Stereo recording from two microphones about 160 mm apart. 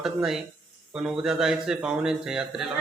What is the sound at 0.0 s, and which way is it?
Speech, 5° right (ahead or behind).